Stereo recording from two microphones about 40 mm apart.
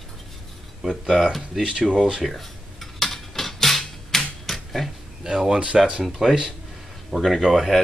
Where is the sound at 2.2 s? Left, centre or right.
Centre.